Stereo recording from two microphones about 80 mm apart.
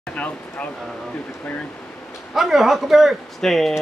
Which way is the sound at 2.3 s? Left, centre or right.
Centre.